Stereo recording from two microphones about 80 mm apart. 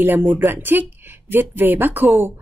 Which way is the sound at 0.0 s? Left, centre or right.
Right.